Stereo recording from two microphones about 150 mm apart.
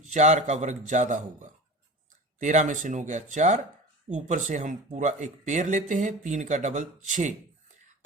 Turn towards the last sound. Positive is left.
turn(degrees=-55)  # may be behind; listen again after turning